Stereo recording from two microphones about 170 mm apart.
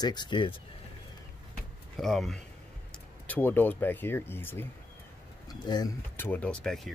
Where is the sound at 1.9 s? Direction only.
Centre (ahead or behind).